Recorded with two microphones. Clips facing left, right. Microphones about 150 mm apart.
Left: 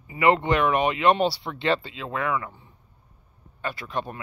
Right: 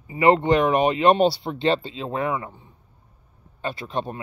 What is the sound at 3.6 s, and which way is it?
Speech, 25° right (ahead or behind).